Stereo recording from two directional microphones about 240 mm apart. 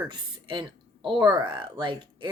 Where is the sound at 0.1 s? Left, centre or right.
Centre.